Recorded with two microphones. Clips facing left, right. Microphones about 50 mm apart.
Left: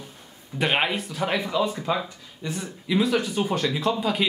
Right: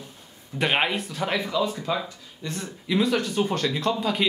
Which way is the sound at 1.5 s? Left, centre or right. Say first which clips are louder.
Left 1 dB; left.